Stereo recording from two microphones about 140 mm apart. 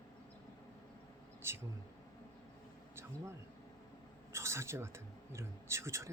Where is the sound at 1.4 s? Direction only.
20° right (ahead or behind).